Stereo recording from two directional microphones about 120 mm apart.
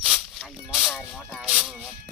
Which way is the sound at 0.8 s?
Centre (ahead or behind).